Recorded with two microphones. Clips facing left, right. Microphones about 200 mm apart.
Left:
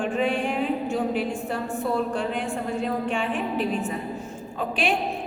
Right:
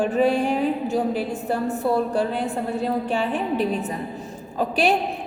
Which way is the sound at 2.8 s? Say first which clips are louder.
Right 3 dB; 35° right (ahead or behind).